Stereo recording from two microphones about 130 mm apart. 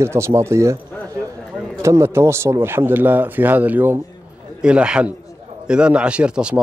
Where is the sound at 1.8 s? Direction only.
20° right (ahead or behind).